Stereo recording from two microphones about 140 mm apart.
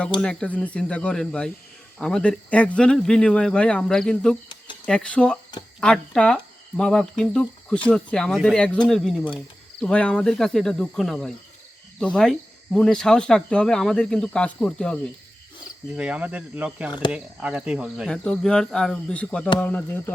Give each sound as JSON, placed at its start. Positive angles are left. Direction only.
{"t": 0.2, "sound": "speech", "side_deg": 5}
{"t": 16.0, "sound": "speech", "side_deg": -5}